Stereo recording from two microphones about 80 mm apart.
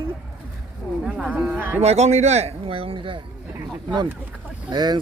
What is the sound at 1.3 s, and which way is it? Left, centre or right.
Speech, right.